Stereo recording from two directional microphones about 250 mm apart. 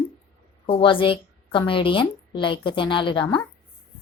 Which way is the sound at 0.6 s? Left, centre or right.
Left.